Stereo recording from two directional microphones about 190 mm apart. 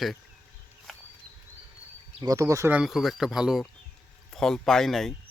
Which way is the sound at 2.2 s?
15° right (ahead or behind).